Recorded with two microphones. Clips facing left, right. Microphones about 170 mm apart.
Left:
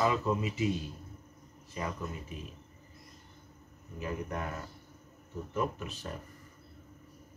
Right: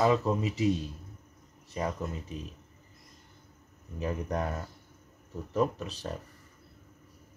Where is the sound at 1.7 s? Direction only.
35° right (ahead or behind).